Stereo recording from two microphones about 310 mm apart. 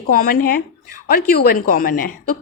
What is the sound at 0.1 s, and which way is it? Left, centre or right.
A woman's voice, left.